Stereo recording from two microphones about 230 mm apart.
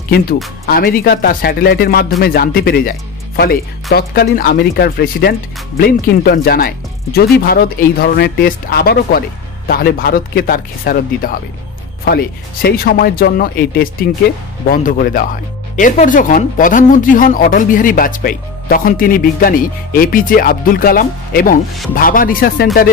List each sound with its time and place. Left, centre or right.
0.7 s speech: left